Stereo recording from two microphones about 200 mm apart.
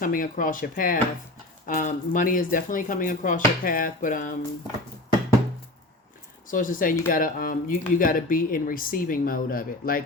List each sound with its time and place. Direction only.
0.0 s speech: 45° left (ahead or behind)
6.5 s speech: 40° left (ahead or behind)